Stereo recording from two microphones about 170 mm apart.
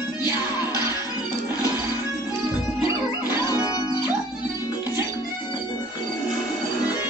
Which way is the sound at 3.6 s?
25° left (ahead or behind).